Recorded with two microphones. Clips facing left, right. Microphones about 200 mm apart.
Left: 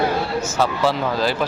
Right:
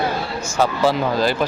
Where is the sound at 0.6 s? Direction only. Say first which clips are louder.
Right 3 dB; centre (ahead or behind).